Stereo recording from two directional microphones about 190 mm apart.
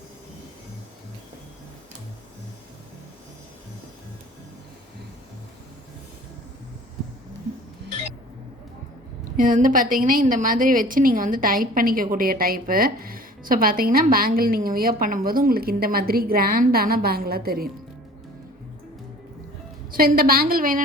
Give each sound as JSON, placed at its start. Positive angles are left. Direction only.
{"t": 9.4, "sound": "a woman's voice", "side_deg": -45}
{"t": 19.9, "sound": "a woman's voice", "side_deg": -50}